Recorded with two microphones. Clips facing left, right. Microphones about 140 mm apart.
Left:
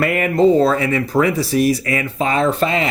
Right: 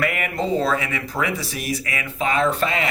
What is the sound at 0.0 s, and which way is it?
Speech, 35° left (ahead or behind).